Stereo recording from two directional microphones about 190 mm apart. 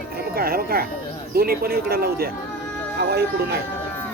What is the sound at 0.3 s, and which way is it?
Speech, 55° right (ahead or behind).